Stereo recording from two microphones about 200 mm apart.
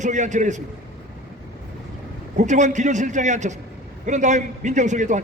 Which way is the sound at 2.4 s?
35° right (ahead or behind).